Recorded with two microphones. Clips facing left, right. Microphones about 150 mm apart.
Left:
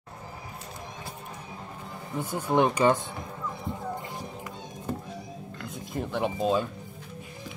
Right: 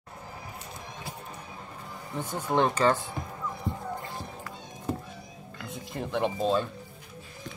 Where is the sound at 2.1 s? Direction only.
10° left (ahead or behind).